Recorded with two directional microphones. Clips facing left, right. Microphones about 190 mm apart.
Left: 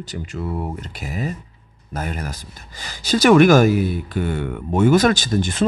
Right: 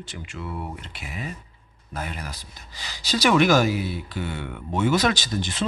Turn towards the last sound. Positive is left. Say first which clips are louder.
# left 7 dB
turn(degrees=50)  # may be behind; listen again after turning